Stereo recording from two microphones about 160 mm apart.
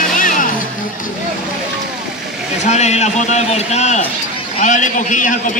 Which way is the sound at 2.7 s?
45° left (ahead or behind).